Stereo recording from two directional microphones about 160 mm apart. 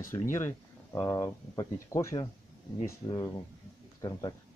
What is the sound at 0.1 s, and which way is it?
Speech, 15° left (ahead or behind).